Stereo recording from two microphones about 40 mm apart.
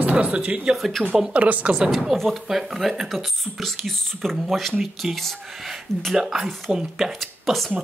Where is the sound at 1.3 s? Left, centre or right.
Right.